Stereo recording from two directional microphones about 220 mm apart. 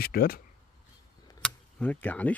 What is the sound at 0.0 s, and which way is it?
Speech, 45° left (ahead or behind).